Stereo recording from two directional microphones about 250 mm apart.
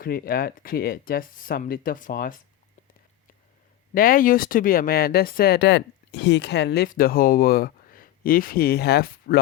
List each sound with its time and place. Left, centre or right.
0.0 s speech: left
3.9 s speech: left